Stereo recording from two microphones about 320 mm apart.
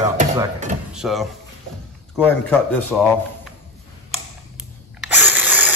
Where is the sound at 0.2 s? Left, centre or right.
Right.